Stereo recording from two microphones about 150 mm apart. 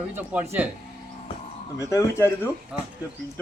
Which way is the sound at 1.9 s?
15° left (ahead or behind).